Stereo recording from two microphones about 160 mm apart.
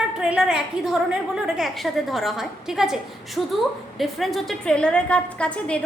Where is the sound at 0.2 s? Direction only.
5° right (ahead or behind).